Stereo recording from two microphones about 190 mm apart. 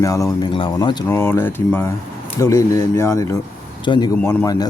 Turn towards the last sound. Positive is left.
turn(degrees=20)  # may be behind; listen again after turning